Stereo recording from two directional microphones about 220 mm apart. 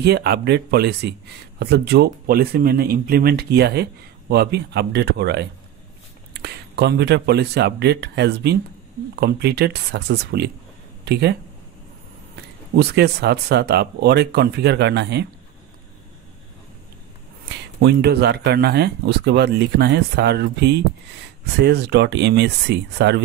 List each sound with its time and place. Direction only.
0.0 s speech: 45° right (ahead or behind)
12.7 s speech: 50° right (ahead or behind)
17.8 s speech: 50° right (ahead or behind)